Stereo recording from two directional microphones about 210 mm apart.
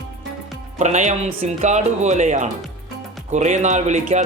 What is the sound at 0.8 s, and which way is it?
Speech, 35° right (ahead or behind).